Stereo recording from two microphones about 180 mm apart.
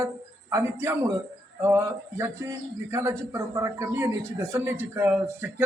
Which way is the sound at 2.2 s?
15° right (ahead or behind).